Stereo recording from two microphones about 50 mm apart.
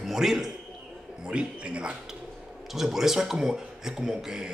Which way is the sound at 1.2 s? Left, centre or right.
Right.